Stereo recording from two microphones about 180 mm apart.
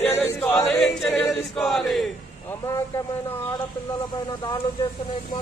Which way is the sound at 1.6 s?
Centre (ahead or behind).